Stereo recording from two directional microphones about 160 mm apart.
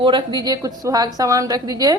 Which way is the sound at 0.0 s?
30° right (ahead or behind).